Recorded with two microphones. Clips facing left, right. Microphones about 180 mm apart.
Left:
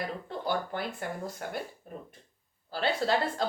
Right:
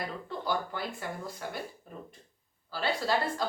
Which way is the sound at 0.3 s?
55° left (ahead or behind).